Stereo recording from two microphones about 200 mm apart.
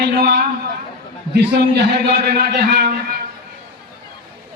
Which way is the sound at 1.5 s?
55° right (ahead or behind).